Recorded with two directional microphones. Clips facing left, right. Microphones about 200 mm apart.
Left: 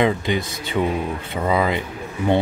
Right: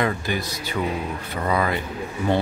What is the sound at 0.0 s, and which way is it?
Speech, 20° left (ahead or behind).